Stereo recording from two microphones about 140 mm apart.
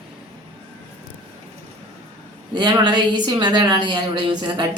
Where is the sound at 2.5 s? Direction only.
35° right (ahead or behind).